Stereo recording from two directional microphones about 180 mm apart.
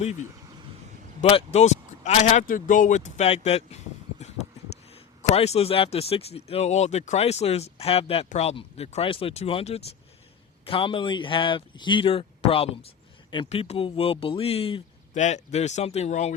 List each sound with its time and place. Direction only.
1.2 s speech: 30° left (ahead or behind)
5.3 s speech: 35° left (ahead or behind)